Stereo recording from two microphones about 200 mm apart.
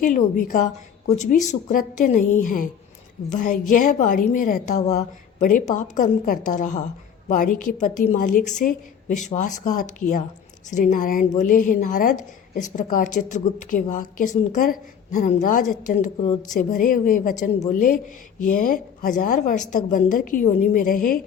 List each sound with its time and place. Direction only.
0.0 s a woman's voice: 40° left (ahead or behind)